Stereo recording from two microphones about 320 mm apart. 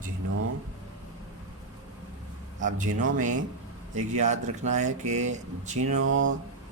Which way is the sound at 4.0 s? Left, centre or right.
Right.